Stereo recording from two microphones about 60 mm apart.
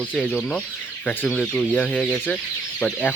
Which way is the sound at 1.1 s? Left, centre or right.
Centre.